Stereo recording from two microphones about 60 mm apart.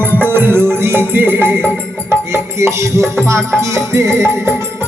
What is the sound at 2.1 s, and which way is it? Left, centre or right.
Music, right.